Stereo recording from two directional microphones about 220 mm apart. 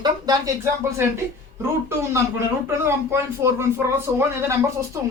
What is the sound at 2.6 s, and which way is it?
Speech, 10° right (ahead or behind).